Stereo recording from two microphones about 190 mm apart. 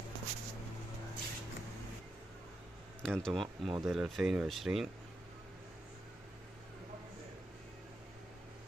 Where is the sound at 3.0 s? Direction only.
5° left (ahead or behind).